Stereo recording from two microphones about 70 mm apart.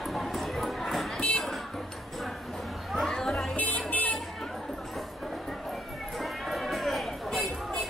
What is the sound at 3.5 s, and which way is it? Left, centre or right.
Vehicle, left.